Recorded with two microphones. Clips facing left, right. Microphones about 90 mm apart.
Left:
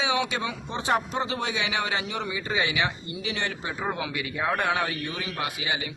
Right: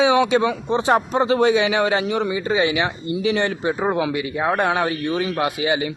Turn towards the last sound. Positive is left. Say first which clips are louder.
# right 10 dB
turn(degrees=-35)  # may be behind; listen again after turning